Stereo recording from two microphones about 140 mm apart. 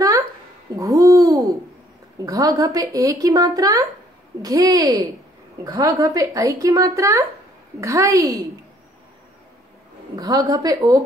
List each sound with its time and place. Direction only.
0.7 s hoot: 25° right (ahead or behind)
2.1 s a woman's voice: 25° right (ahead or behind)
10.1 s a woman's voice: 25° right (ahead or behind)